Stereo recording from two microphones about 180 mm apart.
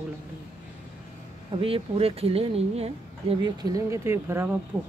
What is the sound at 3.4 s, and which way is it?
Speech, 20° right (ahead or behind).